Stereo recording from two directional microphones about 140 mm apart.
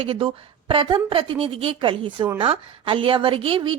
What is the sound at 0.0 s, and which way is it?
A woman's voice, 40° right (ahead or behind).